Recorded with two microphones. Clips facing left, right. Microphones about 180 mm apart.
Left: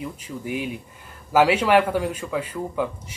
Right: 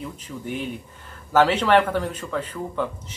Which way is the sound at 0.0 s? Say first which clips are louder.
Left 1 dB; 10° left (ahead or behind).